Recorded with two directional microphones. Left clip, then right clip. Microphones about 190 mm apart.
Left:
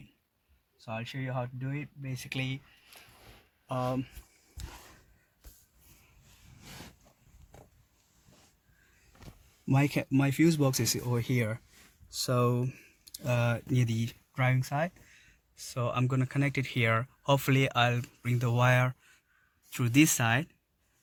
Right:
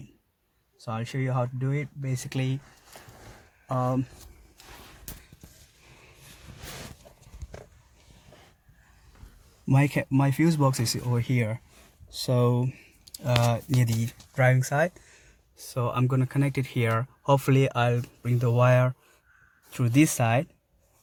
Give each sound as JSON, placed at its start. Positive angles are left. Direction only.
{"t": 1.2, "sound": "speech", "side_deg": 0}
{"t": 3.7, "sound": "speech", "side_deg": 20}
{"t": 9.6, "sound": "speech", "side_deg": -15}
{"t": 15.5, "sound": "speech", "side_deg": 0}